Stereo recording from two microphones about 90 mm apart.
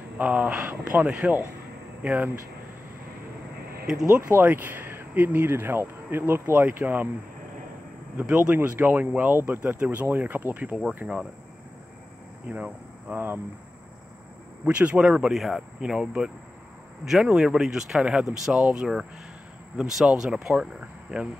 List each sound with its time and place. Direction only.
0.2 s speech: 15° right (ahead or behind)
3.8 s speech: 5° right (ahead or behind)
4.3 s speech: 20° right (ahead or behind)
8.2 s speech: 15° right (ahead or behind)
12.4 s speech: 15° right (ahead or behind)
14.6 s speech: 10° right (ahead or behind)
17.1 s speech: 5° right (ahead or behind)